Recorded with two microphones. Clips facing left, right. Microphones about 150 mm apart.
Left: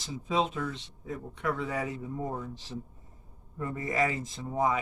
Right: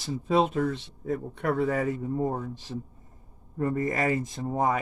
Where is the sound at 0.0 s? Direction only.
50° right (ahead or behind).